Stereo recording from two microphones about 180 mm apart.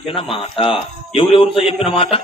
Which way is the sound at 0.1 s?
30° left (ahead or behind).